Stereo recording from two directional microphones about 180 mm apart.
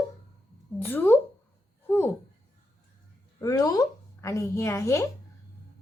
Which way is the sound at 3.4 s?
20° left (ahead or behind).